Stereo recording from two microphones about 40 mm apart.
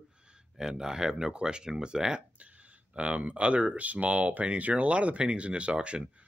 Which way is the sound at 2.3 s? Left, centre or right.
Right.